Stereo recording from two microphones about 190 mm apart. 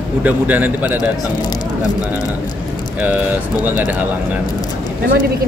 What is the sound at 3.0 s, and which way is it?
Speech, 10° right (ahead or behind).